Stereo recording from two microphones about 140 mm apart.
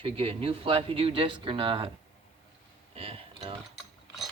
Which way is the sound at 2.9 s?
40° right (ahead or behind).